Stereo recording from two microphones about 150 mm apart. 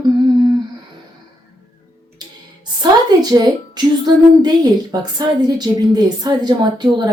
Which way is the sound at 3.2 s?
25° right (ahead or behind).